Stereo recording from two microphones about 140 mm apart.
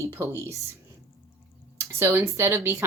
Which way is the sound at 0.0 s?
20° right (ahead or behind).